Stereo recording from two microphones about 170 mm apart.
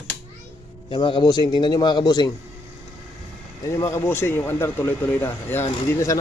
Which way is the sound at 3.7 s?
15° left (ahead or behind).